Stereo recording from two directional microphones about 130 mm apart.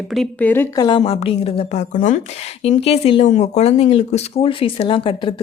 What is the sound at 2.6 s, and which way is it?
Speech, 50° left (ahead or behind).